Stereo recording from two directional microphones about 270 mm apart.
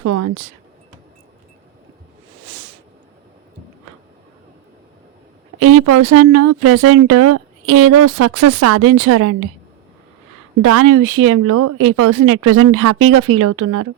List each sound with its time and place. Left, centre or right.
0.0 s speech: right
5.5 s speech: right
10.6 s speech: right